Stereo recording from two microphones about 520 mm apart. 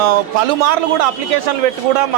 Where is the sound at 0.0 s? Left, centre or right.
Right.